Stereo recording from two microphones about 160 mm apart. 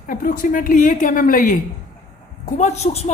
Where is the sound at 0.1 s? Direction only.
55° left (ahead or behind).